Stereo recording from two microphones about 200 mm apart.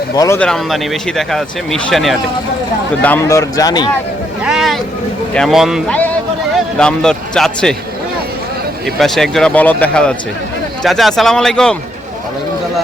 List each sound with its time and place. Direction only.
0.2 s speech: 15° left (ahead or behind)
0.4 s speech: centre (ahead or behind); by 3.9 s 20° left (ahead or behind)
4.4 s speech: centre (ahead or behind)
9.0 s speech: centre (ahead or behind)